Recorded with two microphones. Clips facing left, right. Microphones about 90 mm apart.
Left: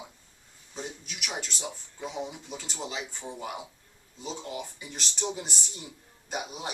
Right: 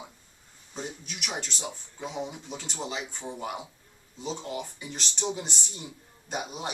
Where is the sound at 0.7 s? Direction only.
Centre (ahead or behind).